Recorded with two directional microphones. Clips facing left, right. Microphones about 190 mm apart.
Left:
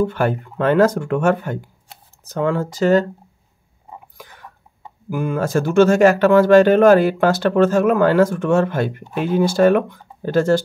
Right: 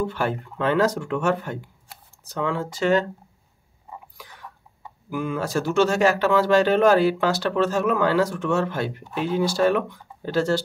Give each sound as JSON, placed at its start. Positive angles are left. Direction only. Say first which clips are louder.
{"t": 0.0, "sound": "speech", "louder": "left 6 dB", "side_deg": 50}
{"t": 5.1, "sound": "speech", "louder": "left 5 dB", "side_deg": 50}